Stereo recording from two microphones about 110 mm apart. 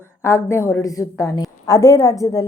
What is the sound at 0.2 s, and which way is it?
A woman's voice, 25° left (ahead or behind).